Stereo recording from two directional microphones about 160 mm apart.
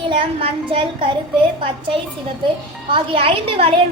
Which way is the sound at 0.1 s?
35° right (ahead or behind).